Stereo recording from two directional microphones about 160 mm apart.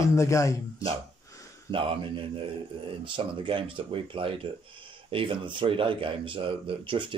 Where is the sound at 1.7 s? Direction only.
35° right (ahead or behind).